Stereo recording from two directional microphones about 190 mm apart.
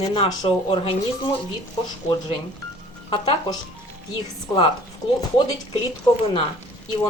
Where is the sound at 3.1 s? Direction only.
25° left (ahead or behind).